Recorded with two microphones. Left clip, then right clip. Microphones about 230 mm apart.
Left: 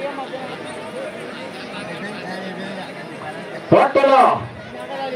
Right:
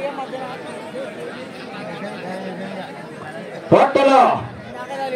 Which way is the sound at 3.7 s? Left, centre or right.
Right.